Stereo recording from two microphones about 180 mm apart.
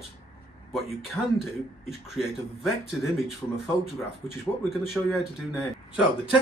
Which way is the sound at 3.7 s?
20° left (ahead or behind).